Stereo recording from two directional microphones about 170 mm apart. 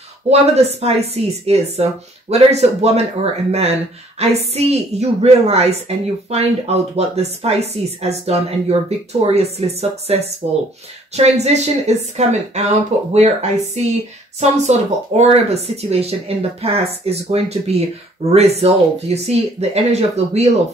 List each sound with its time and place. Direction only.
0.3 s a woman's voice: 40° right (ahead or behind)
4.2 s a woman's voice: 40° right (ahead or behind)